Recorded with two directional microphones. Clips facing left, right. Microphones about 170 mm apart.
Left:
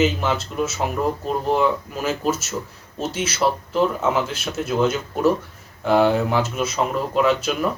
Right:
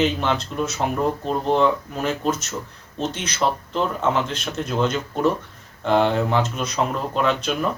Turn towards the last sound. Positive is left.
turn(degrees=5)  # may be behind; listen again after turning